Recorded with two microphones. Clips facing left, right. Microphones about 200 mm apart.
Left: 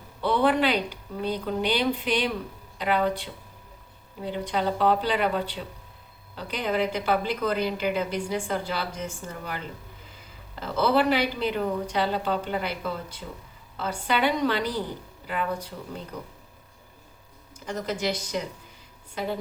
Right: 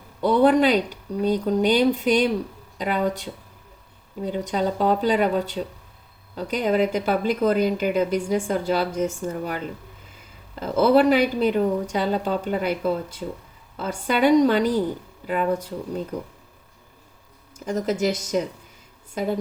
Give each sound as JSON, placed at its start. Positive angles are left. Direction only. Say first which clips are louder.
{"t": 0.2, "sound": "speech", "louder": "right 6 dB", "side_deg": -45}
{"t": 10.6, "sound": "speech", "louder": "right 6 dB", "side_deg": -45}
{"t": 13.7, "sound": "speech", "louder": "right 3 dB", "side_deg": -45}
{"t": 17.7, "sound": "speech", "louder": "right 6 dB", "side_deg": -45}